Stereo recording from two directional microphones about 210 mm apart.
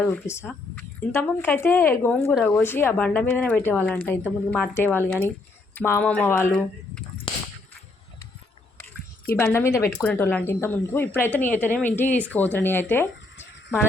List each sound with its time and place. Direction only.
0.0 s speech: 5° left (ahead or behind)
7.3 s whip: 25° left (ahead or behind)
9.3 s speech: 10° left (ahead or behind)